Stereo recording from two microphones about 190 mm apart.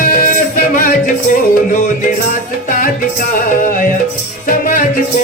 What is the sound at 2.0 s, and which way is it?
Music, 50° left (ahead or behind).